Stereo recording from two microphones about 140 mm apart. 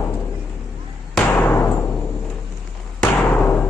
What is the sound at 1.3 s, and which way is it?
Timpani, 15° left (ahead or behind).